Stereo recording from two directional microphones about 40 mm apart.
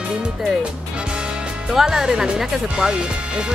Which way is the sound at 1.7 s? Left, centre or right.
Centre.